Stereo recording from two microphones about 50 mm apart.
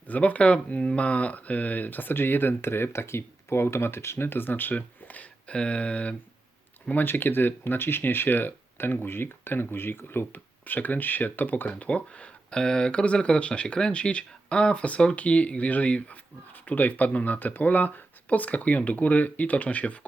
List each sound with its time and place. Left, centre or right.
0.1 s speech: left
7.0 s speech: left
11.8 s speech: left